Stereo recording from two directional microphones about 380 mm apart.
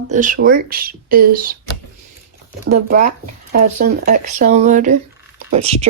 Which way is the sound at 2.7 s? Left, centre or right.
Centre.